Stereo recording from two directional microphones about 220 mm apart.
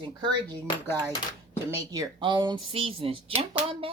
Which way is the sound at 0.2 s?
20° right (ahead or behind).